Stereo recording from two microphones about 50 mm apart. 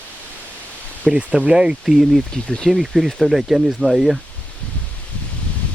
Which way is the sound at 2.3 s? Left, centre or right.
Centre.